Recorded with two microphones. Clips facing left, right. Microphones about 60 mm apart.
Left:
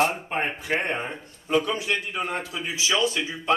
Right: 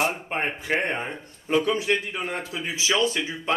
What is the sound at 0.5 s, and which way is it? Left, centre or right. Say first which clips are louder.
Speech: right 1 dB; right.